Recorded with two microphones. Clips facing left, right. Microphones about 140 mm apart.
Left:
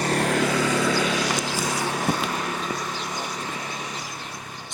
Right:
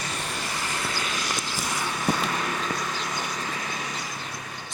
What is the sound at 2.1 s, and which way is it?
Vehicle, 30° left (ahead or behind).